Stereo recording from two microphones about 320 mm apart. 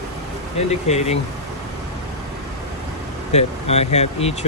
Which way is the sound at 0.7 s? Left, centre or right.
Centre.